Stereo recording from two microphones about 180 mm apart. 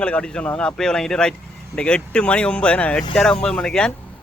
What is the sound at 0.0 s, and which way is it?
Speech, 5° left (ahead or behind).